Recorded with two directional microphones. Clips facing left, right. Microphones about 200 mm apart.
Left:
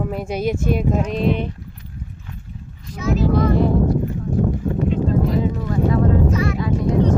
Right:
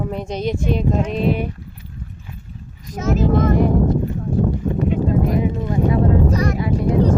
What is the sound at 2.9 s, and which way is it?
Speech, 45° right (ahead or behind).